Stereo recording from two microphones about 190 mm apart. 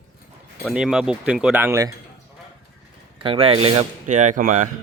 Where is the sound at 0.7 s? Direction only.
Centre (ahead or behind).